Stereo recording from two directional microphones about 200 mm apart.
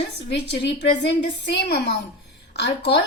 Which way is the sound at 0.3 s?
55° left (ahead or behind).